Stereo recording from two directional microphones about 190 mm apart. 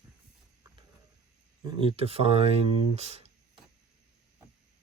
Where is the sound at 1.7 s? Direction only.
25° right (ahead or behind).